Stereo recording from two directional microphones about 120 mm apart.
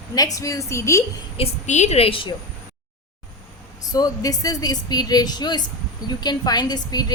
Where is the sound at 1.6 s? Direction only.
75° left (ahead or behind); by 2.4 s 45° left (ahead or behind).